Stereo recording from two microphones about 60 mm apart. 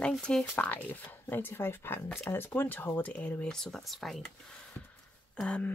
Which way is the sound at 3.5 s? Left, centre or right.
Centre.